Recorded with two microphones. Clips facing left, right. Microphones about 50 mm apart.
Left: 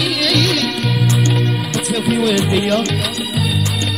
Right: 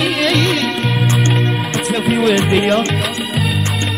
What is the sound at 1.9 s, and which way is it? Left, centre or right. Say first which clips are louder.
Music: right 2 dB; centre.